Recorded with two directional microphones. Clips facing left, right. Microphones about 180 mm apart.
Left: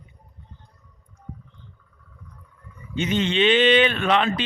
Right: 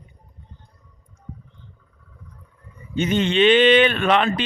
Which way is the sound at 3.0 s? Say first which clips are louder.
Right 3 dB; 50° right (ahead or behind).